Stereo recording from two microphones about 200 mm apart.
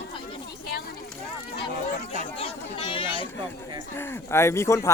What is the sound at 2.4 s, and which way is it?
Chatter, 30° left (ahead or behind).